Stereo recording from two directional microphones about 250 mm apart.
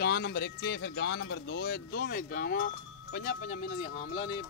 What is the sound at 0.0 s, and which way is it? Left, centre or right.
Speech, left.